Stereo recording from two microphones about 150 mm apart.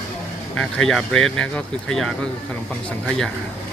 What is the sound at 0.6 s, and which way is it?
Speech, 5° left (ahead or behind).